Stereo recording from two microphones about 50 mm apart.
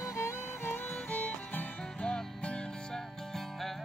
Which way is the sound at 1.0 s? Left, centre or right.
Left.